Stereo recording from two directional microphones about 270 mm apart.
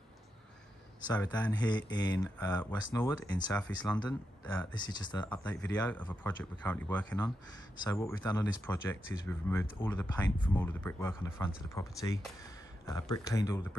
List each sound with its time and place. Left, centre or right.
1.1 s speech: centre
3.5 s speech: centre
4.7 s speech: centre
5.2 s speech: centre